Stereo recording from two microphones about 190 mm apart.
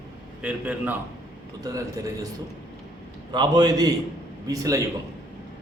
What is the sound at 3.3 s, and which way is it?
A man's voice, 20° right (ahead or behind).